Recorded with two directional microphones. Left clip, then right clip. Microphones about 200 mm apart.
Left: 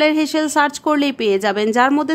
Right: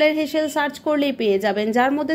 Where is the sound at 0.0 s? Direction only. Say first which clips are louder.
Left 2 dB; 25° left (ahead or behind).